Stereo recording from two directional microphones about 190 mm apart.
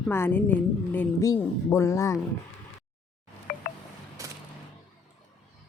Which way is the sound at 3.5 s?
50° left (ahead or behind).